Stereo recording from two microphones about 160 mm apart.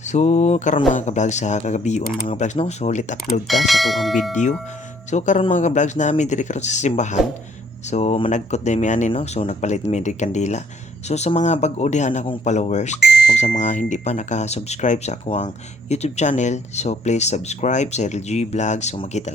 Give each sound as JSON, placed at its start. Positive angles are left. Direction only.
{"t": 0.1, "sound": "speech", "side_deg": 45}
{"t": 3.4, "sound": "speech", "side_deg": 0}
{"t": 5.1, "sound": "speech", "side_deg": 50}
{"t": 9.1, "sound": "speech", "side_deg": 35}
{"t": 9.5, "sound": "speech", "side_deg": 45}